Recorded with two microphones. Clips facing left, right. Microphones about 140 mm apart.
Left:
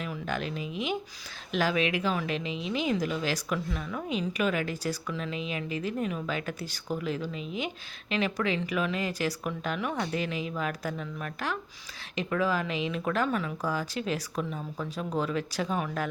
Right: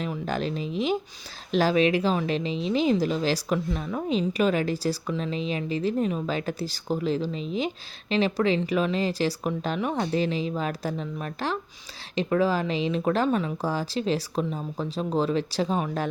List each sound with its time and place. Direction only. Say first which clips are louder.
0.0 s speech: right 5 dB; 35° right (ahead or behind)